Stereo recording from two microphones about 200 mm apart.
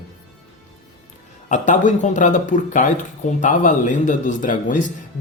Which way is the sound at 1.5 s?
40° left (ahead or behind).